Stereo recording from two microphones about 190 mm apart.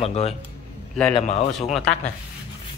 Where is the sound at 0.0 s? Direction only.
35° left (ahead or behind).